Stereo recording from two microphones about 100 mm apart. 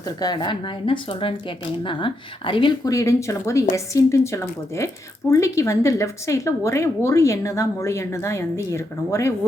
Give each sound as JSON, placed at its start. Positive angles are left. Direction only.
{"t": 0.2, "sound": "speech", "side_deg": 45}
{"t": 2.8, "sound": "speech", "side_deg": 30}